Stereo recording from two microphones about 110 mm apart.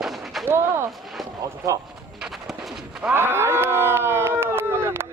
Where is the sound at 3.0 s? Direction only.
20° right (ahead or behind).